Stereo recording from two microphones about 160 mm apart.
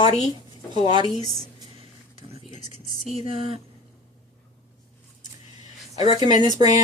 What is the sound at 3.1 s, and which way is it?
Speech, 35° right (ahead or behind).